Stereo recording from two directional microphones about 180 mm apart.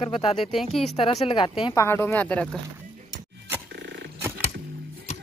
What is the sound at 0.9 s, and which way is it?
Speech, 30° left (ahead or behind).